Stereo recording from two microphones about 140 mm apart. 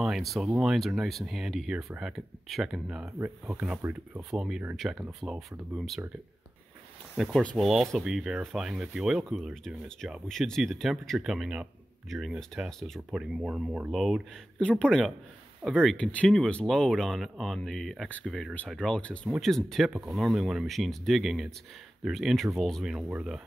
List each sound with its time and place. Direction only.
0.0 s speech: centre (ahead or behind)
7.2 s speech: centre (ahead or behind)
19.9 s speech: 10° right (ahead or behind)